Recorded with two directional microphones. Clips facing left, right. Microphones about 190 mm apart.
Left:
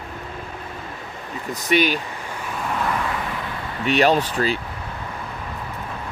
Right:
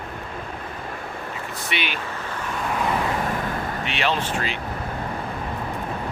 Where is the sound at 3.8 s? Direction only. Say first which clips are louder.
Left 10 dB; 40° left (ahead or behind).